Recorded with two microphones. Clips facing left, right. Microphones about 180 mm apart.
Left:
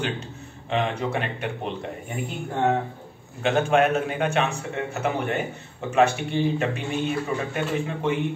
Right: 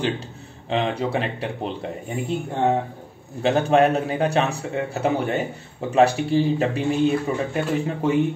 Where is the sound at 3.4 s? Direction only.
35° right (ahead or behind).